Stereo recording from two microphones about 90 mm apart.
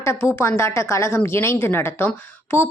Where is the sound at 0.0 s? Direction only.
35° left (ahead or behind).